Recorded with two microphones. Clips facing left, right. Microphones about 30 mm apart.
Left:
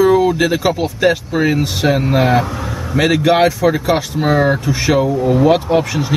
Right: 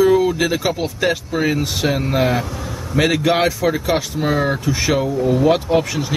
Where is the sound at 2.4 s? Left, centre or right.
Left.